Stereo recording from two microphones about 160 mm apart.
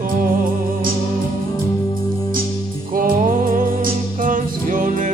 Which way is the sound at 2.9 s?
60° right (ahead or behind).